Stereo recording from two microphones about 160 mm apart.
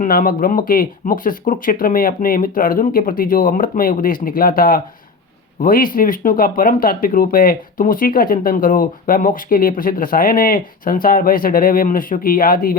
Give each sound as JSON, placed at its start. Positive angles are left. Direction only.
{"t": 0.0, "sound": "speech", "side_deg": 60}